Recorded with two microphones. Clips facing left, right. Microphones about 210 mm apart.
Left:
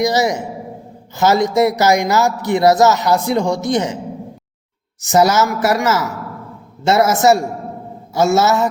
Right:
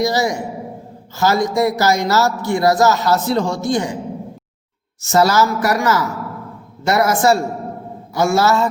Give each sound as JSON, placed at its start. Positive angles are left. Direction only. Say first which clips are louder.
{"t": 0.0, "sound": "speech", "louder": "left 2 dB", "side_deg": 20}
{"t": 4.9, "sound": "speech", "louder": "left 1 dB", "side_deg": 15}